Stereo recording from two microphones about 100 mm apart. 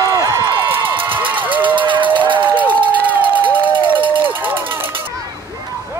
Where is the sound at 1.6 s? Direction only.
55° right (ahead or behind).